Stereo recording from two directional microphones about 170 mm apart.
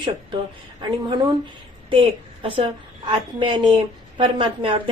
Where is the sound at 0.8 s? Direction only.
25° right (ahead or behind).